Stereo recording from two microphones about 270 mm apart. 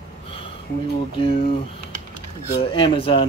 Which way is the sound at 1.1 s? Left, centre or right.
Centre.